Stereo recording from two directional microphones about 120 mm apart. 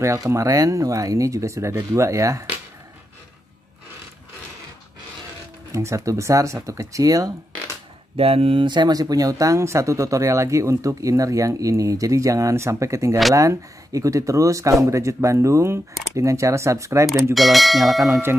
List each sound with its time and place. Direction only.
0.0 s speech: 25° right (ahead or behind)
5.7 s speech: 25° right (ahead or behind)
8.2 s speech: 55° right (ahead or behind); by 17.1 s 25° right (ahead or behind)
17.1 s speech: centre (ahead or behind)